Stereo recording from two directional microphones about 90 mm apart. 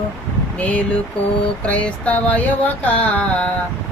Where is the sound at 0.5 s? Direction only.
15° left (ahead or behind).